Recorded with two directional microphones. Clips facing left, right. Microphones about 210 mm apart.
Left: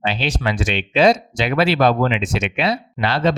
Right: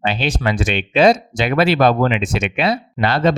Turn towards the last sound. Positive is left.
turn(degrees=-50)  # may be behind; listen again after turning